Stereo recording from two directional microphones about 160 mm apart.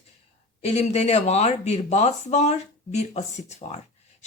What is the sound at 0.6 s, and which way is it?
Speech, 40° left (ahead or behind).